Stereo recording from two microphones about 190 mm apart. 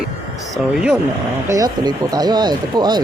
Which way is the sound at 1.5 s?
20° right (ahead or behind).